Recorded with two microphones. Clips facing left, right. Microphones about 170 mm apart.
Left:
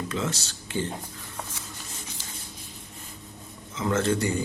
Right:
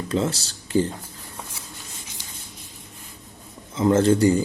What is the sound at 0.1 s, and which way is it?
Speech, 35° right (ahead or behind).